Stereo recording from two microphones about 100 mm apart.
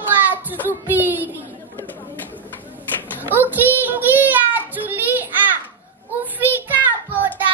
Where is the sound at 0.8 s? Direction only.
20° right (ahead or behind).